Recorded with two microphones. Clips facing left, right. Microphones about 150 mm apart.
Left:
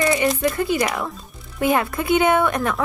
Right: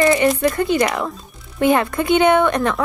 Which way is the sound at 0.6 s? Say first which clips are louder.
Right 3 dB; 5° left (ahead or behind).